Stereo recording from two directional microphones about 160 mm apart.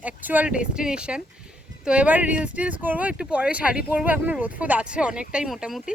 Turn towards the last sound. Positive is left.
turn(degrees=-5)  # may be behind; listen again after turning